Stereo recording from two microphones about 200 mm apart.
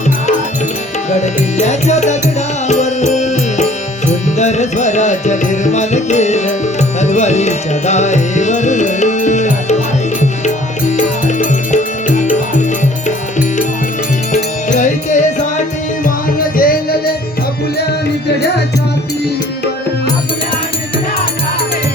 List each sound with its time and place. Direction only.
1.1 s music: 35° left (ahead or behind)
14.3 s music: 40° left (ahead or behind)